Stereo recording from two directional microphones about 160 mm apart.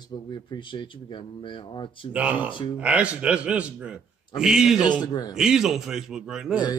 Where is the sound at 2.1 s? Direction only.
10° right (ahead or behind).